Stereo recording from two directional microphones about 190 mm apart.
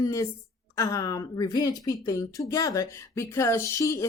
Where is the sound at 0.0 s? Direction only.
15° left (ahead or behind).